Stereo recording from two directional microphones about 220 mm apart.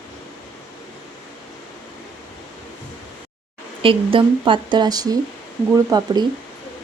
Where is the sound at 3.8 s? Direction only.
25° right (ahead or behind).